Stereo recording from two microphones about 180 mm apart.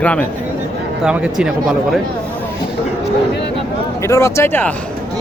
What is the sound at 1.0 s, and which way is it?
Speech, 5° right (ahead or behind).